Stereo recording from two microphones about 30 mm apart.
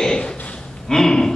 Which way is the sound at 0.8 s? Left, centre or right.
Centre.